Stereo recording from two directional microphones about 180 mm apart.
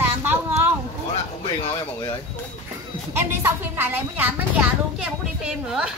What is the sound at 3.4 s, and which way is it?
Speech, 10° right (ahead or behind).